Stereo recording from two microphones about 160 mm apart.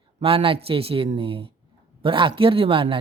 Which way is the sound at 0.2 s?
35° right (ahead or behind).